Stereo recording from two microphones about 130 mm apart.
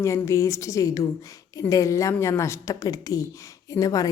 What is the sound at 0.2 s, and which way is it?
A woman's voice, 20° left (ahead or behind).